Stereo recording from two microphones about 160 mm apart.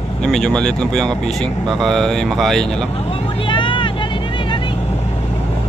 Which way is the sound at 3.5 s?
30° left (ahead or behind).